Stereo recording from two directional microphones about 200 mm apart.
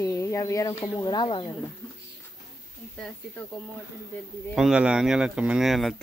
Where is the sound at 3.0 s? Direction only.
5° left (ahead or behind).